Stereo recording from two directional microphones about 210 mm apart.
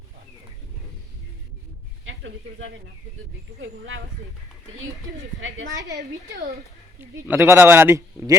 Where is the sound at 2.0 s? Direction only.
65° right (ahead or behind).